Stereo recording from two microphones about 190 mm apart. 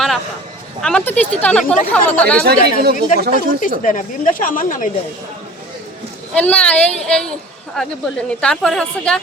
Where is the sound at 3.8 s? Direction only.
45° left (ahead or behind).